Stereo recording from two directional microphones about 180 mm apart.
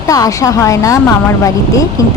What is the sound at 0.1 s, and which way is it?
Speech, 20° left (ahead or behind).